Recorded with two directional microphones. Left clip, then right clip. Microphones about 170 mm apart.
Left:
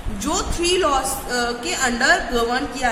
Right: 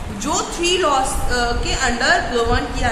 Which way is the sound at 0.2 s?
35° left (ahead or behind).